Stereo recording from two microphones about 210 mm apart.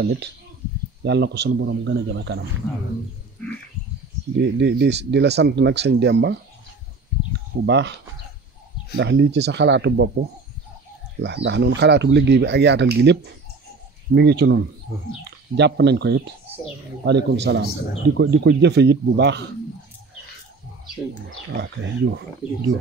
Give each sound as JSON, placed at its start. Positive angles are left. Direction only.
{"t": 0.0, "sound": "a man's voice", "side_deg": -50}
{"t": 4.4, "sound": "speech", "side_deg": -55}
{"t": 7.6, "sound": "speech", "side_deg": -55}
{"t": 8.9, "sound": "speech", "side_deg": -55}
{"t": 11.1, "sound": "a man's voice", "side_deg": -55}
{"t": 21.5, "sound": "speech", "side_deg": -55}